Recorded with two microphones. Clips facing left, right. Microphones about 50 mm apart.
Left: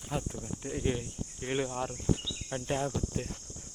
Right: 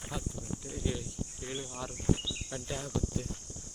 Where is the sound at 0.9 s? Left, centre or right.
Left.